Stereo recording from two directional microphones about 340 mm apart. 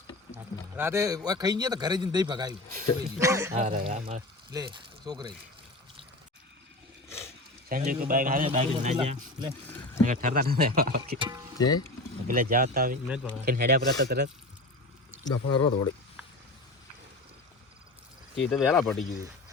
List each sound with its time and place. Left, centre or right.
0.8 s speech: centre
3.5 s speech: centre
7.7 s a man's voice: right
11.2 s speech: centre
12.3 s a man's voice: right
13.1 s speech: centre
13.4 s a man's voice: right
15.3 s speech: left
18.3 s speech: centre